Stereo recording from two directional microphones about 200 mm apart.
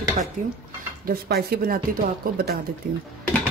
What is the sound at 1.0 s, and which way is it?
Cutlery, 50° right (ahead or behind).